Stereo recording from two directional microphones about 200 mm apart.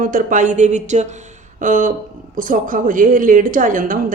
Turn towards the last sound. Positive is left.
turn(degrees=-40)  # may be behind; listen again after turning